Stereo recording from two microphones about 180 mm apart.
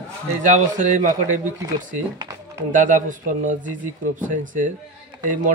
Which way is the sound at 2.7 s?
45° right (ahead or behind).